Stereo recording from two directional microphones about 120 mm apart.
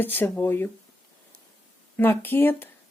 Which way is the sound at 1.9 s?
15° left (ahead or behind).